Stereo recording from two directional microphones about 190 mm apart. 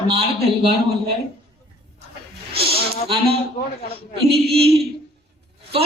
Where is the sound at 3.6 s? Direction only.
45° left (ahead or behind).